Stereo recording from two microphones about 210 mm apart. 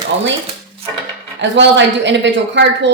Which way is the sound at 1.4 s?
60° right (ahead or behind).